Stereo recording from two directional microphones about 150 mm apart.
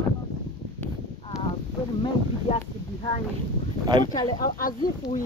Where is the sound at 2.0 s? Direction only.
40° left (ahead or behind).